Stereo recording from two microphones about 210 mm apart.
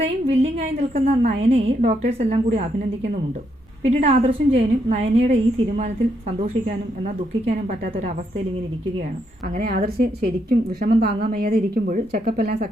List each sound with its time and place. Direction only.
0.0 s a woman's voice: 30° right (ahead or behind)
3.8 s a woman's voice: 30° right (ahead or behind)
9.6 s a woman's voice: 45° right (ahead or behind)